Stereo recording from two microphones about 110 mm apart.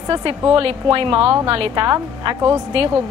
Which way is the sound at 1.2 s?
30° right (ahead or behind).